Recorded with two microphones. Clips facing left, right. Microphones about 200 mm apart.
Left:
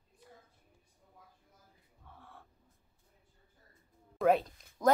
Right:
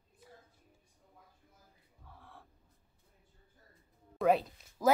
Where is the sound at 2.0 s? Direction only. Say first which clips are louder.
Even; centre (ahead or behind).